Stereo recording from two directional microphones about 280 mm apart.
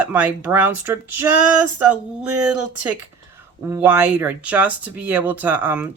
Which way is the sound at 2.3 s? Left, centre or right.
Right.